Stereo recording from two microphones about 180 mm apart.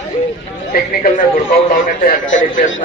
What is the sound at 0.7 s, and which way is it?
Speech, 60° left (ahead or behind).